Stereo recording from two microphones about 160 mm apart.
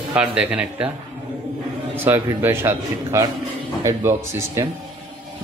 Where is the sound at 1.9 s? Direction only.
15° right (ahead or behind).